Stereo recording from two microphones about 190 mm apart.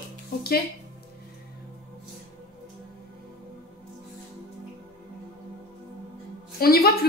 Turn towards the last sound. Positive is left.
turn(degrees=55)  # may be behind; listen again after turning